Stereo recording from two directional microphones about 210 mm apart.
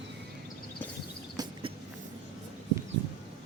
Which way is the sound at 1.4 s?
20° right (ahead or behind).